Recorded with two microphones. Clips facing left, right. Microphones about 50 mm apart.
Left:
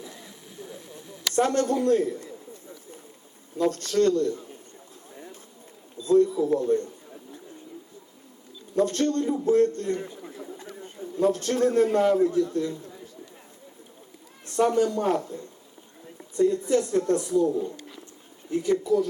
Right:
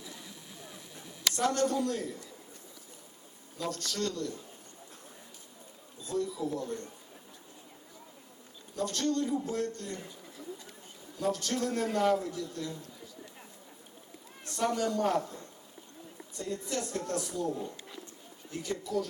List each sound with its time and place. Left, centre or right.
1.3 s a woman's voice: left
3.6 s a woman's voice: left
6.1 s a woman's voice: left
8.7 s a man's voice: left
14.4 s speech: left
16.4 s a woman's voice: left